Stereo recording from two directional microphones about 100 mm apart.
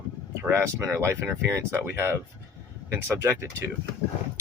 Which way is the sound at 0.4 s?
25° right (ahead or behind).